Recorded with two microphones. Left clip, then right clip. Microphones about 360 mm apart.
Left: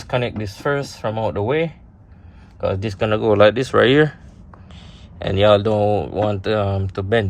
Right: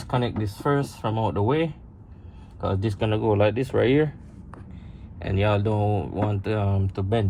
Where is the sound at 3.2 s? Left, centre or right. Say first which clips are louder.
Left 9 dB; left.